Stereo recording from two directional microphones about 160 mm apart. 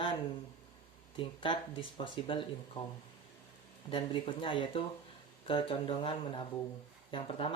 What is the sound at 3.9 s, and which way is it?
Speech, 30° left (ahead or behind).